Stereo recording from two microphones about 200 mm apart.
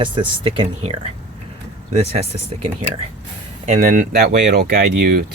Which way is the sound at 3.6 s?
40° right (ahead or behind).